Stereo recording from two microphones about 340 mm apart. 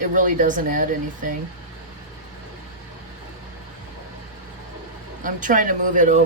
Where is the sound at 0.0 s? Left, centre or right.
Right.